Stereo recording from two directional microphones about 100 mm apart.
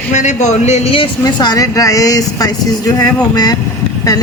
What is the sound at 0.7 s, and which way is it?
Speech, 80° left.